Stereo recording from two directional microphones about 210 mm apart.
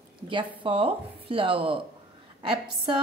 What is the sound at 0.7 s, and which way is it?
A woman's voice, 25° right (ahead or behind).